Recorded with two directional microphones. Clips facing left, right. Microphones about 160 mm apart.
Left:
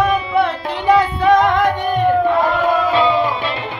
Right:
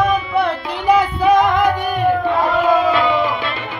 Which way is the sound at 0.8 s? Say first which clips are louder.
Left 1 dB; centre (ahead or behind).